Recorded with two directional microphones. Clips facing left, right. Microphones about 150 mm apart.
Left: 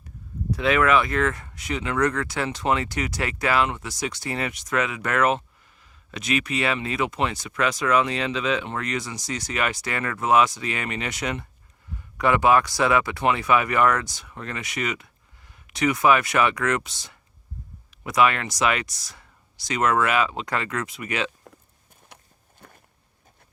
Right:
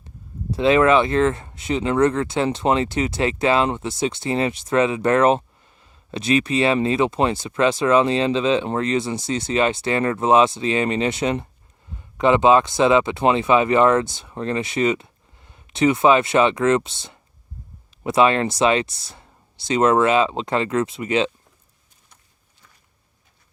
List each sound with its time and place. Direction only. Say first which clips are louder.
0.5 s speech: right 5 dB; 25° right (ahead or behind)
22.1 s walk: left 8 dB; 70° left (ahead or behind)
22.6 s a sound: left 8 dB; 60° left (ahead or behind)